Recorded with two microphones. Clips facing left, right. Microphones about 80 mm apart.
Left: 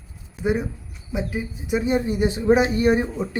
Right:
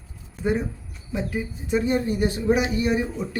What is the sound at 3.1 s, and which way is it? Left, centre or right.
Speech, left.